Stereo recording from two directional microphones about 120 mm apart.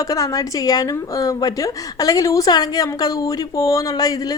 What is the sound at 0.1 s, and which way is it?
A woman's voice, 30° left (ahead or behind).